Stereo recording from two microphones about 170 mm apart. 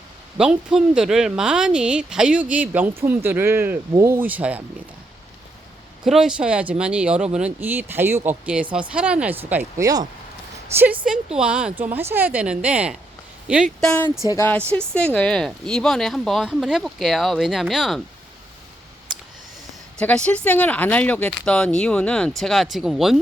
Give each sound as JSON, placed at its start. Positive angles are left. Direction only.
{"t": 0.3, "sound": "a woman's voice", "side_deg": -5}
{"t": 6.1, "sound": "a woman's voice", "side_deg": -5}
{"t": 9.8, "sound": "speech", "side_deg": -25}
{"t": 11.0, "sound": "a woman's voice", "side_deg": -5}
{"t": 14.3, "sound": "speech", "side_deg": 15}
{"t": 20.0, "sound": "speech", "side_deg": 5}